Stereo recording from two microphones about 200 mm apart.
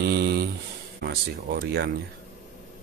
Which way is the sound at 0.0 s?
55° right (ahead or behind).